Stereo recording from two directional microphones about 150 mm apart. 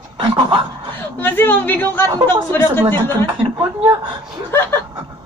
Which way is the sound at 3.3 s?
35° right (ahead or behind).